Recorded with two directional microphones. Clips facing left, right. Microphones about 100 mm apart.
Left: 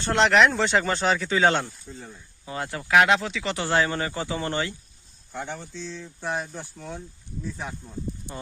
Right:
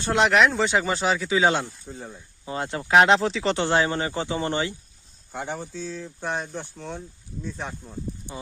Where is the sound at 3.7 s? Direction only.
20° right (ahead or behind).